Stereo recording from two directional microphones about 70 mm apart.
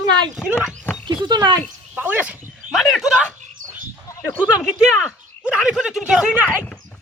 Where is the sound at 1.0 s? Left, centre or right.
Right.